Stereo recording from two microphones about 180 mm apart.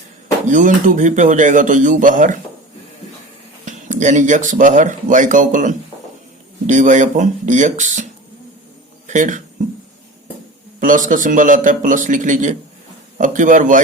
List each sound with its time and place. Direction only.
0.4 s speech: 45° right (ahead or behind)
3.7 s speech: 45° right (ahead or behind)
9.0 s speech: 45° right (ahead or behind)
10.8 s speech: 45° right (ahead or behind)